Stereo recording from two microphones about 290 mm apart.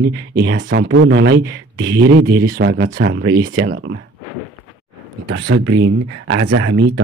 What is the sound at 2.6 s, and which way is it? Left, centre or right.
Speech, right.